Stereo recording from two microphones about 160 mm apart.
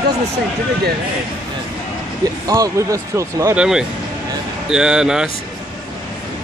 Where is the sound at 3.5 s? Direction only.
5° right (ahead or behind).